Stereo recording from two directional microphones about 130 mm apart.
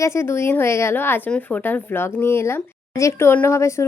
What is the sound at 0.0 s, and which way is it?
Speech, 20° left (ahead or behind).